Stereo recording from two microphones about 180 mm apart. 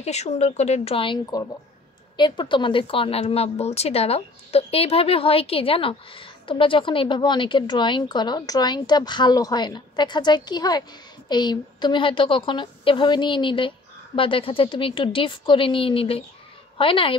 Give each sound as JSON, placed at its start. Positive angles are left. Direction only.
{"t": 0.0, "sound": "a woman's voice", "side_deg": 35}